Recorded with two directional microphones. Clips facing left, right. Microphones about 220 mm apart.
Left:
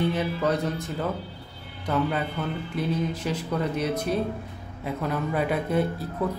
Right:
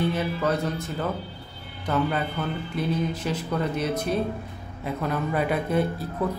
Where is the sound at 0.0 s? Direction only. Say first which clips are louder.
Even; 20° left (ahead or behind); by 5.9 s centre (ahead or behind).